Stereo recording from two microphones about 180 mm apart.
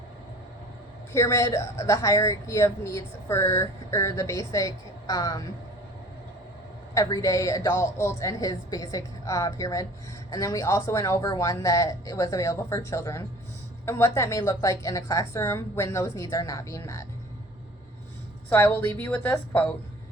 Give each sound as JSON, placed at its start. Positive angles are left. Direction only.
{"t": 1.1, "sound": "speech", "side_deg": 15}
{"t": 6.9, "sound": "speech", "side_deg": 20}
{"t": 18.4, "sound": "speech", "side_deg": 10}